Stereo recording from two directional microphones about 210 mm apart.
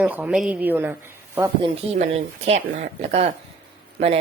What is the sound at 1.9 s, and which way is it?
A woman's voice, 30° right (ahead or behind).